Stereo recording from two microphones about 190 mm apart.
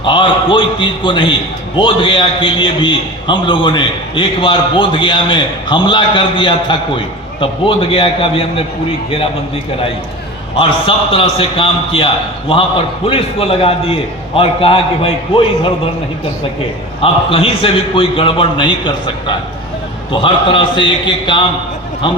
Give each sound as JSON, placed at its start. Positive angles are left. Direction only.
{"t": 0.0, "sound": "a man's voice", "side_deg": 25}
{"t": 10.6, "sound": "a man's voice", "side_deg": 30}
{"t": 17.0, "sound": "a man's voice", "side_deg": 30}